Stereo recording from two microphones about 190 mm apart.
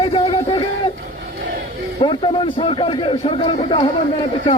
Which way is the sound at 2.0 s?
25° left (ahead or behind).